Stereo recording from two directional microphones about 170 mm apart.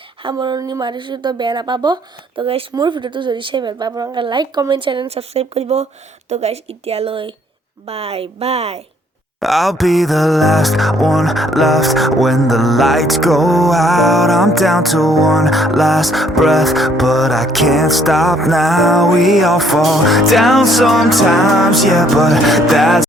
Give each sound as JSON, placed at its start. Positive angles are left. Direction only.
{"t": 0.2, "sound": "a woman's voice", "side_deg": -30}
{"t": 9.4, "sound": "music", "side_deg": 0}